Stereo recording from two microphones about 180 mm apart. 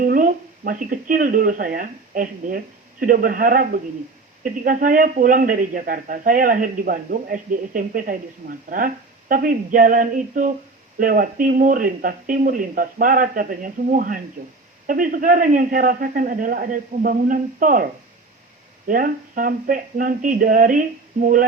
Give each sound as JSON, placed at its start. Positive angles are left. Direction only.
{"t": 0.0, "sound": "speech", "side_deg": -50}
{"t": 18.9, "sound": "speech", "side_deg": -50}